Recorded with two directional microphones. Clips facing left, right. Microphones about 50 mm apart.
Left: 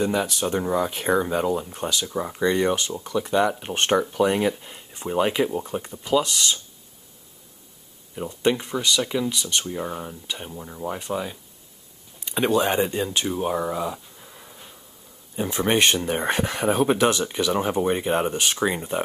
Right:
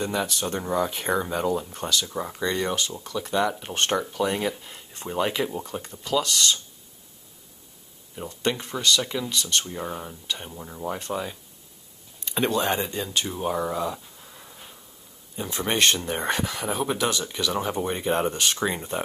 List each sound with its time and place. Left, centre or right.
0.0 s speech: centre
8.2 s speech: centre
13.3 s insect: centre
15.3 s speech: left
16.3 s speech: left; by 19.0 s centre